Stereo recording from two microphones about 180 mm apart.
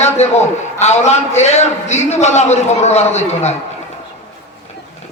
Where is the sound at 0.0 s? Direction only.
40° left (ahead or behind).